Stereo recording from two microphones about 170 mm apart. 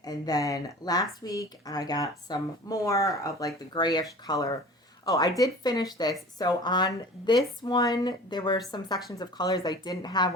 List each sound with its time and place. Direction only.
0.0 s speech: 20° left (ahead or behind)